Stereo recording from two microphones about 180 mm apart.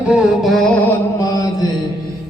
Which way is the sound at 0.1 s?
Centre (ahead or behind).